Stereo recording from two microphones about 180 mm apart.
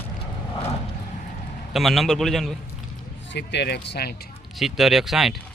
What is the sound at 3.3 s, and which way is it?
Speech, 70° left (ahead or behind).